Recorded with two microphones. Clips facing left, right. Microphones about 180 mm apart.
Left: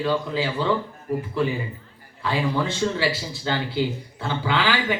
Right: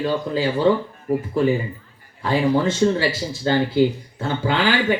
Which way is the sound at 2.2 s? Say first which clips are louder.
Right 5 dB; 45° right (ahead or behind).